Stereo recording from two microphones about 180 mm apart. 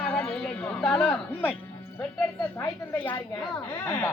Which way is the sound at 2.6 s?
10° left (ahead or behind).